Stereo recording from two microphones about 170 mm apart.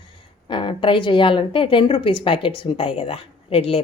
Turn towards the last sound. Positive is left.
turn(degrees=35)  # may be behind; listen again after turning